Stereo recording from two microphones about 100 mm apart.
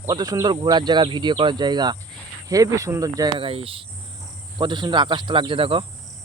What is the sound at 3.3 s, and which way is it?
Speech, 70° right (ahead or behind).